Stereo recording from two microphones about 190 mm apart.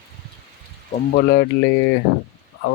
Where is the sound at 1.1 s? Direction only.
70° left (ahead or behind).